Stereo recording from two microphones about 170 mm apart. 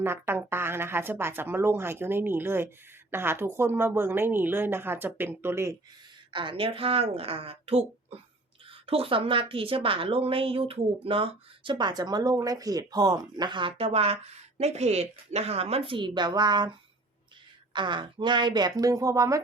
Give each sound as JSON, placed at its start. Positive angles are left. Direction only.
{"t": 0.0, "sound": "a woman's voice", "side_deg": -15}
{"t": 6.3, "sound": "speech", "side_deg": -30}
{"t": 17.7, "sound": "speech", "side_deg": -25}